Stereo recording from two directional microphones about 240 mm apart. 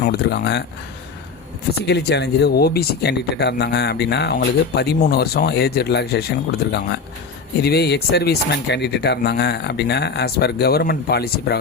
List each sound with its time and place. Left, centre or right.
0.0 s speech: left
1.9 s speech: left